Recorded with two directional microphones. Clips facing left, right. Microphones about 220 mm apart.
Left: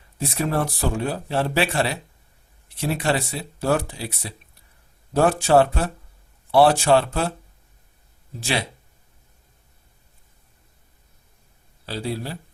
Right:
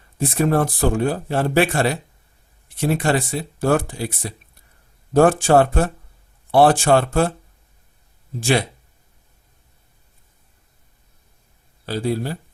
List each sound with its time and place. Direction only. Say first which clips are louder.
0.2 s speech: right 5 dB; 50° right (ahead or behind)
8.4 s speech: right 7 dB; 50° right (ahead or behind)
11.9 s speech: right 6 dB; 50° right (ahead or behind)